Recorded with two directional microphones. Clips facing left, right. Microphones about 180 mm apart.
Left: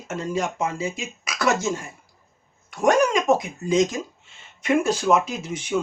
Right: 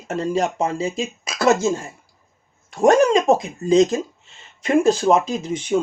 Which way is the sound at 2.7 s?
30° right (ahead or behind).